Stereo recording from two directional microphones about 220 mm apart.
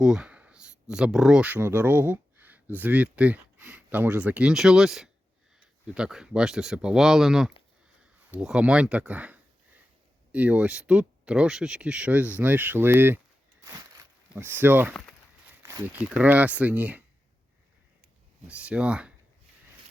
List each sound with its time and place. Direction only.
0.0 s speech: 5° right (ahead or behind)
13.7 s a sound: 15° right (ahead or behind)
14.6 s speech: 10° right (ahead or behind)
18.4 s speech: 5° right (ahead or behind)